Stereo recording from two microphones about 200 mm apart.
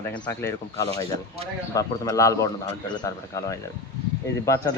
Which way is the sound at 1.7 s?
15° left (ahead or behind).